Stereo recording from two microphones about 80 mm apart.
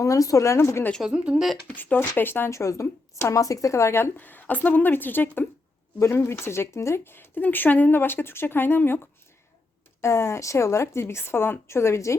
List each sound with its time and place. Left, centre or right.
0.0 s a woman's voice: left
1.0 s speech: centre
1.6 s speech: left
2.5 s speech: left
10.0 s a woman's voice: left